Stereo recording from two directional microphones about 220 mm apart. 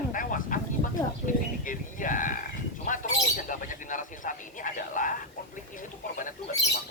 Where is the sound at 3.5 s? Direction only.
35° left (ahead or behind).